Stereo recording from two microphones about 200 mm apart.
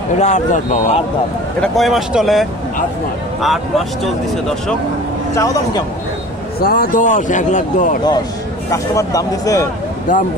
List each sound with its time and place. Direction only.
0.2 s speech: 35° left (ahead or behind)
1.6 s speech: centre (ahead or behind)
5.3 s speech: 15° left (ahead or behind)
6.6 s speech: 45° left (ahead or behind)
8.6 s speech: 15° left (ahead or behind)